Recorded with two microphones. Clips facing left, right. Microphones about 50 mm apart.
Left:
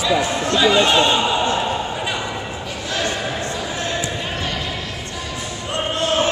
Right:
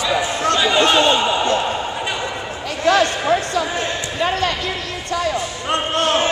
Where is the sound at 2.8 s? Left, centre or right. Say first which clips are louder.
Right 10 dB; right.